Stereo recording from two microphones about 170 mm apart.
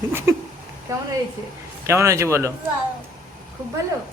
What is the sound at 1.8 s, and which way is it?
Speech, 15° right (ahead or behind).